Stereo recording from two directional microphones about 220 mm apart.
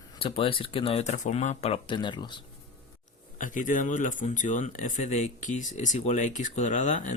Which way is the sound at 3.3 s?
35° left (ahead or behind).